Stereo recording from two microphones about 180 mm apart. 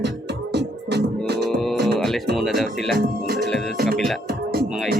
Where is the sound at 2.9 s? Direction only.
60° right (ahead or behind).